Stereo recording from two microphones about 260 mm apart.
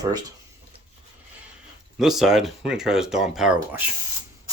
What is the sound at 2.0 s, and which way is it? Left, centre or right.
Speech, centre.